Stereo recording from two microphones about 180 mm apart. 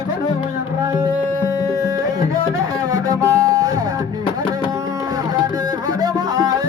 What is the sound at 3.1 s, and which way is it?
Music, 15° right (ahead or behind).